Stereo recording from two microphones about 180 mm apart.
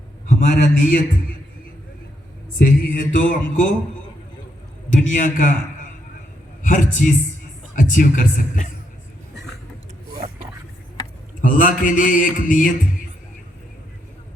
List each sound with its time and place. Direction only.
0.3 s mantra: 45° left (ahead or behind)
2.6 s mantra: 45° left (ahead or behind)
4.9 s mantra: 45° left (ahead or behind)
6.6 s a man's voice: 45° left (ahead or behind)
7.8 s mantra: 45° left (ahead or behind)
11.3 s mantra: 45° left (ahead or behind)